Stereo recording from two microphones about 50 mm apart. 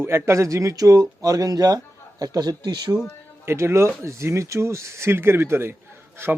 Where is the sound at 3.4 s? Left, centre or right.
Right.